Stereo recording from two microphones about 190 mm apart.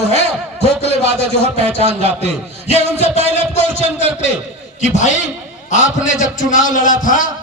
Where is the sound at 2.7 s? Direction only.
35° left (ahead or behind).